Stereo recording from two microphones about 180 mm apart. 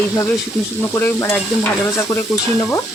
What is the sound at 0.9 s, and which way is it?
Frying, 15° left (ahead or behind).